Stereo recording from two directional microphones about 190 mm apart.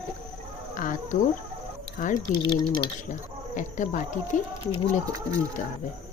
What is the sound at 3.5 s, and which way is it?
Speech, 40° left (ahead or behind).